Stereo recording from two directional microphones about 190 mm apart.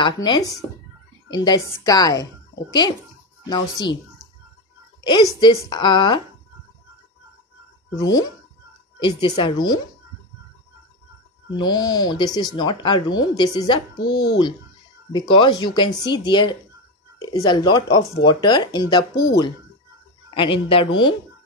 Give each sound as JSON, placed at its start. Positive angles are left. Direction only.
{"t": 0.0, "sound": "a woman's voice", "side_deg": 25}
{"t": 3.4, "sound": "a woman's voice", "side_deg": 20}
{"t": 5.0, "sound": "a woman's voice", "side_deg": 25}
{"t": 7.9, "sound": "a woman's voice", "side_deg": 20}
{"t": 11.5, "sound": "a woman's voice", "side_deg": 20}
{"t": 20.2, "sound": "a woman's voice", "side_deg": 25}